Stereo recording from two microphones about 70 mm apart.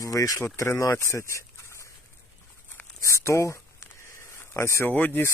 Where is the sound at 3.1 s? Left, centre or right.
Left.